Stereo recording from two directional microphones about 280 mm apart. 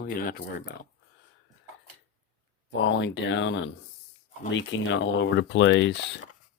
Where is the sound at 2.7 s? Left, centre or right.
Left.